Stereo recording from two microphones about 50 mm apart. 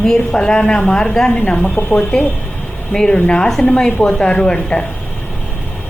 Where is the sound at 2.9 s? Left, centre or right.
Centre.